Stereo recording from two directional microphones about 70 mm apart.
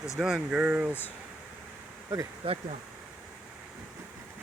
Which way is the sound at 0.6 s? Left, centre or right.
Right.